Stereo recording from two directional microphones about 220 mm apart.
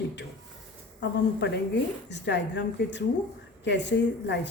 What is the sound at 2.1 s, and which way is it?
A woman's voice, 50° left (ahead or behind).